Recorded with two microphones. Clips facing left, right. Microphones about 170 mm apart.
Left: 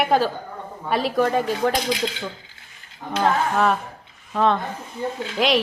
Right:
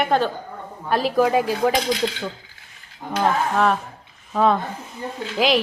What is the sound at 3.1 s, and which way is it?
A woman's voice, centre (ahead or behind).